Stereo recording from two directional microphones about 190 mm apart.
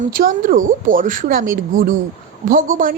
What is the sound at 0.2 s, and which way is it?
Speech, 45° right (ahead or behind).